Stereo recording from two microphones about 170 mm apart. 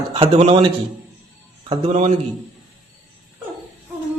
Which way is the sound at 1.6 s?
35° right (ahead or behind).